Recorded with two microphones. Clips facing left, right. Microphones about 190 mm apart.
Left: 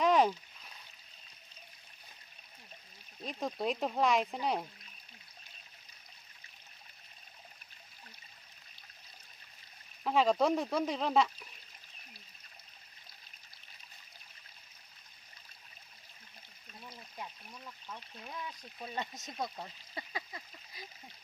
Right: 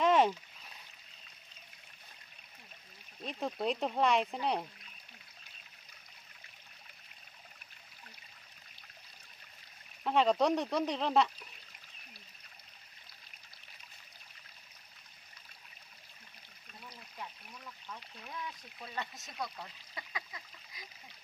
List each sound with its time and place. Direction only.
0.0 s a sound: centre (ahead or behind)
3.2 s speech: centre (ahead or behind)
10.0 s speech: centre (ahead or behind)
17.9 s speech: 25° left (ahead or behind)